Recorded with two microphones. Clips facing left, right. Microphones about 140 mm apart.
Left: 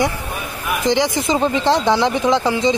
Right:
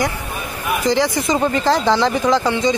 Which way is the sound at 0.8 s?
20° left (ahead or behind).